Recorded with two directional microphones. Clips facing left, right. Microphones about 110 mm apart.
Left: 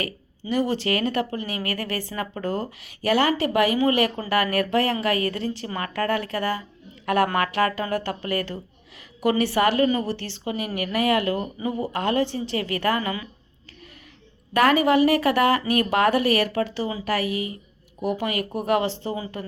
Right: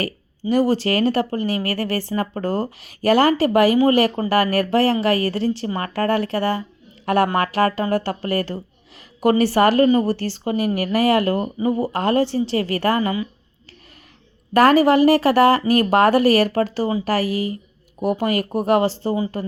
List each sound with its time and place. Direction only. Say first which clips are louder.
0.0 s speech: right 6 dB; 40° right (ahead or behind)
14.5 s speech: right 5 dB; 40° right (ahead or behind)